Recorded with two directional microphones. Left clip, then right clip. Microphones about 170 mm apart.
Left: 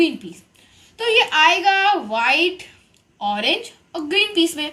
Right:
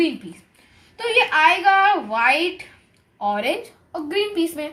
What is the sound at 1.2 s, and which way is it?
A woman's voice, 20° right (ahead or behind).